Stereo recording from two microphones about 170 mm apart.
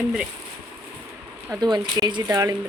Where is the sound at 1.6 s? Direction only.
25° right (ahead or behind).